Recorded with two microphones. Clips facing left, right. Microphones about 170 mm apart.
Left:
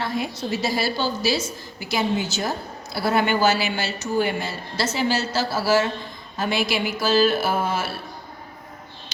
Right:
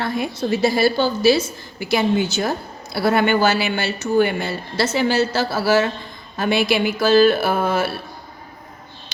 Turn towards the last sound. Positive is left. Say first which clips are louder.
# right 4 dB
turn(degrees=-60)  # may be behind; listen again after turning